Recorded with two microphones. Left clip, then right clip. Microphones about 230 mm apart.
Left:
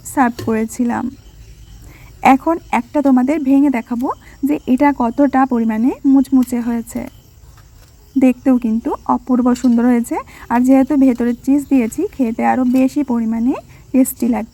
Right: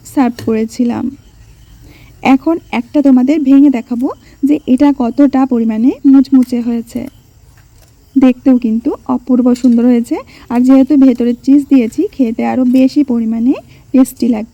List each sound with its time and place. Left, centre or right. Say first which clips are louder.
0.1 s speech: right 2 dB; centre
2.2 s speech: even; centre
8.3 s speech: right 4 dB; centre